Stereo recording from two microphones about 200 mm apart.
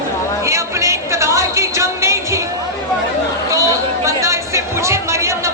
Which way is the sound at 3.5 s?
15° right (ahead or behind).